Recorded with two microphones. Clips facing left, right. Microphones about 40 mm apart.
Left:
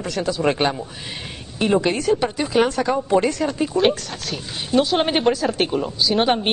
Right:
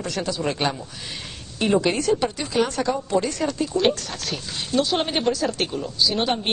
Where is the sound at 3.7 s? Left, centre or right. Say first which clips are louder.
Left 2 dB; centre.